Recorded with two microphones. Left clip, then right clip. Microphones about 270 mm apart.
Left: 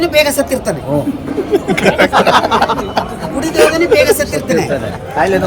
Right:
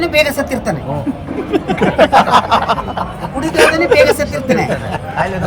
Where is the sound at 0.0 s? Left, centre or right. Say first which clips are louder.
Left 2 dB; centre.